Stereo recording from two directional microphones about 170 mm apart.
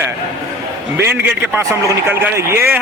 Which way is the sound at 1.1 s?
15° right (ahead or behind).